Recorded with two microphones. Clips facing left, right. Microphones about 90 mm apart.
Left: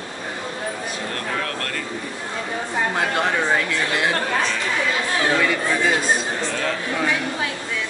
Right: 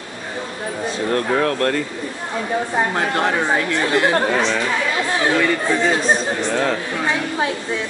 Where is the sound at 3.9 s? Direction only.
40° right (ahead or behind).